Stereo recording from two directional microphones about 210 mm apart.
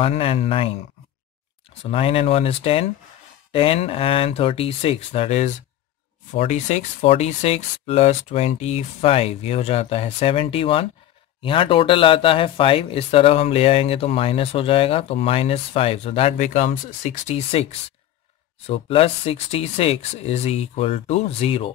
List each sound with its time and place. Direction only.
0.0 s speech: 25° left (ahead or behind)
1.8 s speech: 25° left (ahead or behind)